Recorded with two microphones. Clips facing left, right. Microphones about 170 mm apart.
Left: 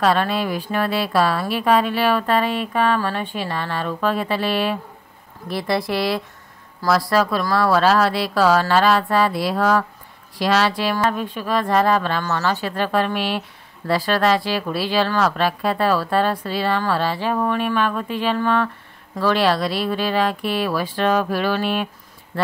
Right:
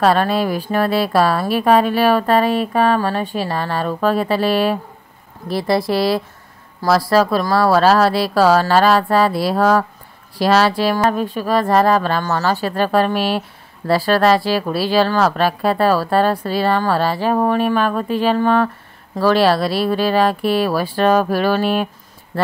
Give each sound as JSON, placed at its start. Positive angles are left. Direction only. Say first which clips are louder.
{"t": 0.0, "sound": "speech", "louder": "right 4 dB", "side_deg": -40}
{"t": 5.5, "sound": "speech", "louder": "right 4 dB", "side_deg": -30}